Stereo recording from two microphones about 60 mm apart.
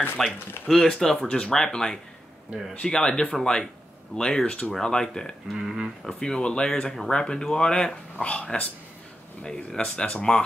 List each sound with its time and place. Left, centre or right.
0.2 s speech: centre
4.7 s speech: centre
5.5 s speech: centre
6.1 s speech: centre